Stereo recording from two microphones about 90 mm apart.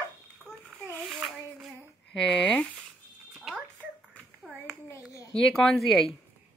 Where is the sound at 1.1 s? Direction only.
Centre (ahead or behind).